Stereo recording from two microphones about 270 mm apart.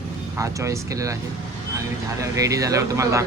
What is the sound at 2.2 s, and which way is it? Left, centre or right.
Speech, centre.